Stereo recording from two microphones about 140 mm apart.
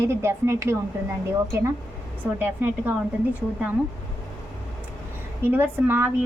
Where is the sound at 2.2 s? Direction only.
15° right (ahead or behind).